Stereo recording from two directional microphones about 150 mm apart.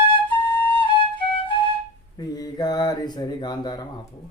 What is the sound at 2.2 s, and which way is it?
Speech, 25° left (ahead or behind).